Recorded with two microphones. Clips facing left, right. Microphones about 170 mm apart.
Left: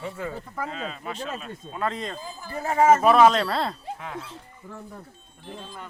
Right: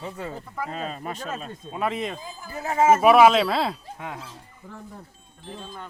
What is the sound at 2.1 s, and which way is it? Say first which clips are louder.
Speech: left 1 dB; 5° right (ahead or behind).